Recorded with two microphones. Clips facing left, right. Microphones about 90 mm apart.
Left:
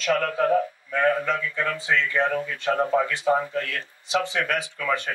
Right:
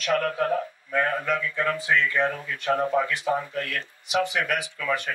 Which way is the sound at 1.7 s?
30° left (ahead or behind).